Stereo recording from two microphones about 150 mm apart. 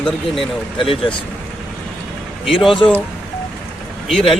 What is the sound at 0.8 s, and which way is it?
Speech, 35° left (ahead or behind).